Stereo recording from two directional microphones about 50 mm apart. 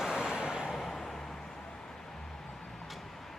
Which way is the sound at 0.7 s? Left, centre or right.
Centre.